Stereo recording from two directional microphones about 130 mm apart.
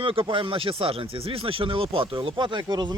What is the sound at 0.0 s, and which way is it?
Speech, 45° right (ahead or behind).